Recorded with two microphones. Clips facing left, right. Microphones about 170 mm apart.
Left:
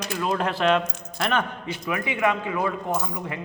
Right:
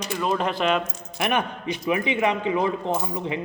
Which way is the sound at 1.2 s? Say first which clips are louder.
Right 1 dB; 15° right (ahead or behind).